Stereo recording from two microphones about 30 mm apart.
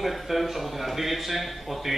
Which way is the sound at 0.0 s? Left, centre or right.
Centre.